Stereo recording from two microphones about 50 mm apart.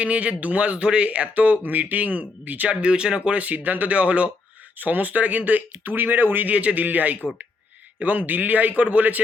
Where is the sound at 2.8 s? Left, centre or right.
Centre; by 6.4 s right.